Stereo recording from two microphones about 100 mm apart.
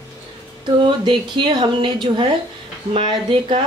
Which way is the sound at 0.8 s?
55° right (ahead or behind).